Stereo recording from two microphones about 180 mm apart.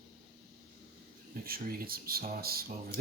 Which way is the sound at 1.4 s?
55° right (ahead or behind).